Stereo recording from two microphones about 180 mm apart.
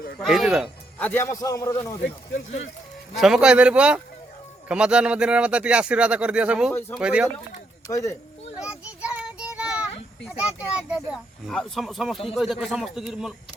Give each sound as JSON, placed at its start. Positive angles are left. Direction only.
{"t": 0.2, "sound": "speech", "side_deg": 0}
{"t": 0.9, "sound": "a man's voice", "side_deg": 10}
{"t": 2.0, "sound": "speech", "side_deg": 70}
{"t": 3.2, "sound": "speech", "side_deg": 0}
{"t": 7.9, "sound": "a man's voice", "side_deg": 15}
{"t": 8.6, "sound": "child singing", "side_deg": -5}
{"t": 10.3, "sound": "speech", "side_deg": -5}